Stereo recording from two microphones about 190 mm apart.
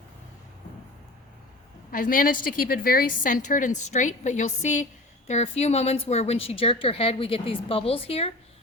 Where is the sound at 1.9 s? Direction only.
45° left (ahead or behind).